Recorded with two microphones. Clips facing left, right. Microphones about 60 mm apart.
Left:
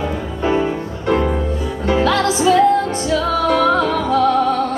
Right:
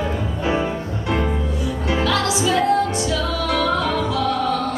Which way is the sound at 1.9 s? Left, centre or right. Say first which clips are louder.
Left 5 dB; left.